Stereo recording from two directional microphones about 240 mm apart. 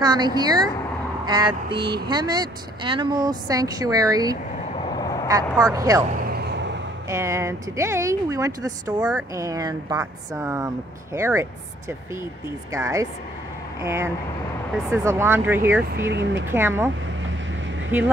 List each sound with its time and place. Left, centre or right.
0.0 s speech: centre
6.1 s vehicle: right
7.1 s speech: centre
12.7 s speech: centre
16.0 s speech: right
16.4 s speech: centre